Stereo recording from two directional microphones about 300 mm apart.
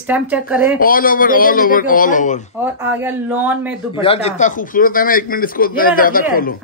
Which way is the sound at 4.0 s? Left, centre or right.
Centre.